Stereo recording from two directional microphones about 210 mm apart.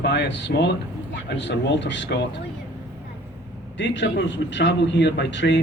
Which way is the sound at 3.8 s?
60° left (ahead or behind).